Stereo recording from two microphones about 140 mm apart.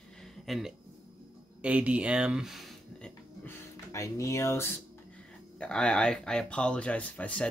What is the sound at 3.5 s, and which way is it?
Speech, 20° left (ahead or behind).